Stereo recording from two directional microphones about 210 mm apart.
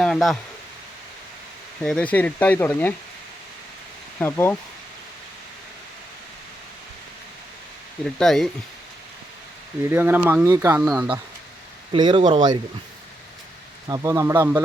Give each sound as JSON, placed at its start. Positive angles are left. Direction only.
{"t": 0.0, "sound": "speech", "side_deg": 0}
{"t": 1.8, "sound": "speech", "side_deg": 5}
{"t": 4.2, "sound": "speech", "side_deg": 10}
{"t": 8.0, "sound": "speech", "side_deg": 0}
{"t": 9.8, "sound": "speech", "side_deg": -10}
{"t": 11.9, "sound": "speech", "side_deg": -20}
{"t": 13.8, "sound": "speech", "side_deg": -15}